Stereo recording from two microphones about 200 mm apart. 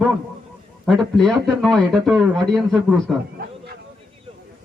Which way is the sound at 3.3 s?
50° right (ahead or behind).